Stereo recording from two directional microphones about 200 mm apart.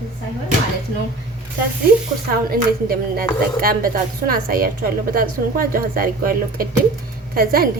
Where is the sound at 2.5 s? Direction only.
45° right (ahead or behind).